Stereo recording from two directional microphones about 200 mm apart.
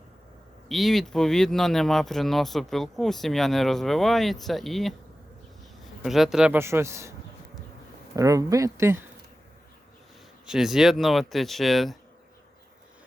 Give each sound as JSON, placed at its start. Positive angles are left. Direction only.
{"t": 0.7, "sound": "speech", "side_deg": 0}
{"t": 6.0, "sound": "a man's voice", "side_deg": 0}
{"t": 8.1, "sound": "a man's voice", "side_deg": -15}
{"t": 10.4, "sound": "speech", "side_deg": -5}